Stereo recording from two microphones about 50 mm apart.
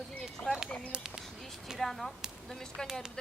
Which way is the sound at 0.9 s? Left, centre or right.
Centre.